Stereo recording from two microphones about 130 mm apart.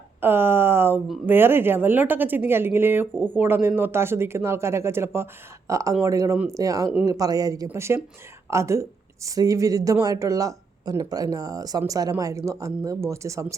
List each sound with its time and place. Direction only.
0.2 s speech: 15° right (ahead or behind)